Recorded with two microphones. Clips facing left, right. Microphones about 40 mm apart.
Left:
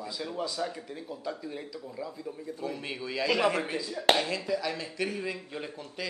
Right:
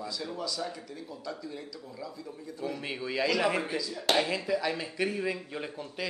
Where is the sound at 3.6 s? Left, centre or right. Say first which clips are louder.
Even; left.